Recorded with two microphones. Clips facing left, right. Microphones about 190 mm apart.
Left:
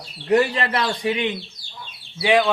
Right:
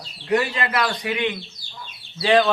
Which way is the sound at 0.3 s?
35° left (ahead or behind).